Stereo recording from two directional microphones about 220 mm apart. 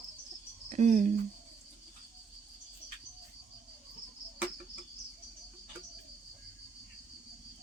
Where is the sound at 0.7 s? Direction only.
30° right (ahead or behind).